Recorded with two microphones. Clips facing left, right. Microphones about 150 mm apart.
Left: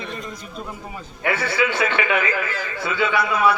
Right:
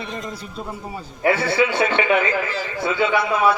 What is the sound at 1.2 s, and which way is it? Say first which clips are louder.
A man's voice: right 4 dB; 30° right (ahead or behind).